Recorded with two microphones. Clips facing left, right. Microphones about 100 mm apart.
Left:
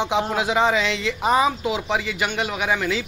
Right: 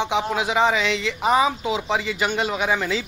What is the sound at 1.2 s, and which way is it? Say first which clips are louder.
Speech: even; 10° right (ahead or behind).